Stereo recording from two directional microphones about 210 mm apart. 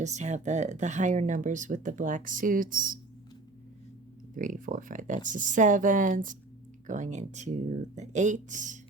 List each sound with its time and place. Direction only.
0.0 s speech: 35° right (ahead or behind)
4.4 s speech: 40° right (ahead or behind)